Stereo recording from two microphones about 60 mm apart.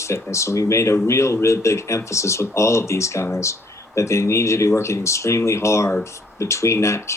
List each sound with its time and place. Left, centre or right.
0.0 s speech: left